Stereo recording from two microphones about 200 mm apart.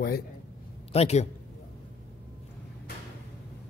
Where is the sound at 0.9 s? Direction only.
30° left (ahead or behind).